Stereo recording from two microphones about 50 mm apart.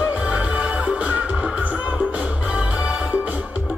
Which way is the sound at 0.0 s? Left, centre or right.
Right.